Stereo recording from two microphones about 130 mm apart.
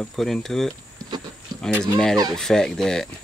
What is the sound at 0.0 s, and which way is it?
Speech, centre (ahead or behind).